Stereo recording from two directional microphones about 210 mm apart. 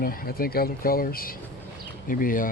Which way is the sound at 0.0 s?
45° left (ahead or behind).